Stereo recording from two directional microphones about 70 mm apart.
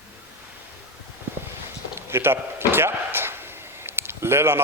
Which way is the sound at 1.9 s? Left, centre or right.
Right.